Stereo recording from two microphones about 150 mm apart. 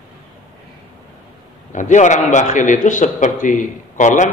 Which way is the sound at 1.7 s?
55° left (ahead or behind).